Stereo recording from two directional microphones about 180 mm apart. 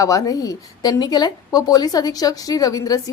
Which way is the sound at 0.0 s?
20° left (ahead or behind).